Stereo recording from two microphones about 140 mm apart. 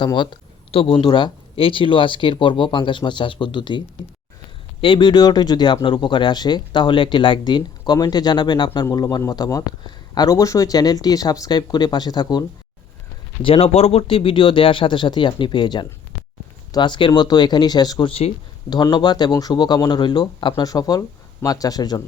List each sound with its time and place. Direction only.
0.0 s speech: 35° left (ahead or behind)
13.4 s speech: 45° left (ahead or behind); by 22.0 s 30° left (ahead or behind)